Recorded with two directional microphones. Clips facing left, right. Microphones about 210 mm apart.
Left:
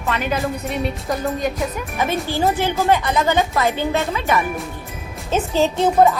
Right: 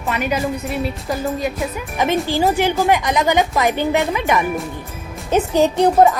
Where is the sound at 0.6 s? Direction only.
Centre (ahead or behind).